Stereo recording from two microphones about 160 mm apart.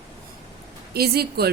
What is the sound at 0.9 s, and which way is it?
Speech, 80° right.